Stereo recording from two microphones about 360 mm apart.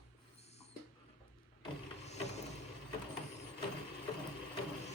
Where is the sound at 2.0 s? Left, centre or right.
Centre.